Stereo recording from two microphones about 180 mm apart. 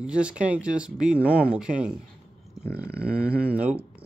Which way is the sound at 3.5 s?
5° right (ahead or behind).